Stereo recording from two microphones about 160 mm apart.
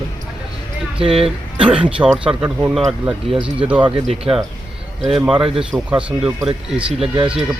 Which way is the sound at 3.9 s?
35° right (ahead or behind).